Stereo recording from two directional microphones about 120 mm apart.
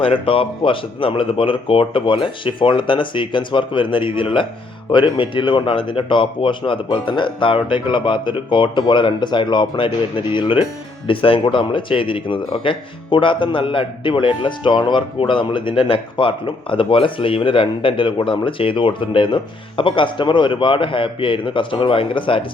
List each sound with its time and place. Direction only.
0.0 s speech: 45° left (ahead or behind)